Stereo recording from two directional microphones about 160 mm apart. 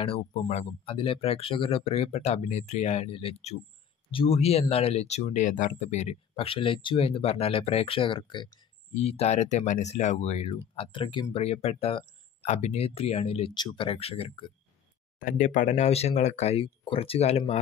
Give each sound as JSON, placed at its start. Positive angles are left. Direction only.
{"t": 0.3, "sound": "speech", "side_deg": 45}
{"t": 0.9, "sound": "speech", "side_deg": 35}
{"t": 8.9, "sound": "speech", "side_deg": 40}
{"t": 15.1, "sound": "speech", "side_deg": 55}